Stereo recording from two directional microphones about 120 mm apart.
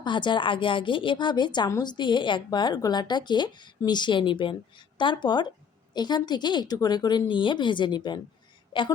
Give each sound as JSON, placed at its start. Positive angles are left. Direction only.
{"t": 0.0, "sound": "a woman's voice", "side_deg": 40}